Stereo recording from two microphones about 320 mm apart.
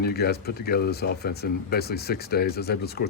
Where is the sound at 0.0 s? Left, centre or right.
Left.